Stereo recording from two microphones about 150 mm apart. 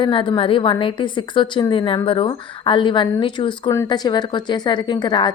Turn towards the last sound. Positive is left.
turn(degrees=30)  # may be behind; listen again after turning